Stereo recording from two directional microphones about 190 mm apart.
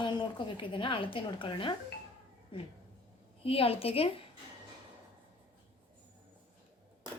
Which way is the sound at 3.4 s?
30° left (ahead or behind).